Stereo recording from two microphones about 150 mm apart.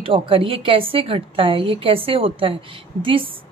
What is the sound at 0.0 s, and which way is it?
A woman's voice, 35° right (ahead or behind).